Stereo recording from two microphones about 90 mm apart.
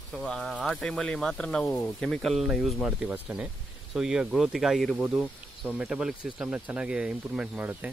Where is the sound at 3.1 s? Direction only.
15° right (ahead or behind).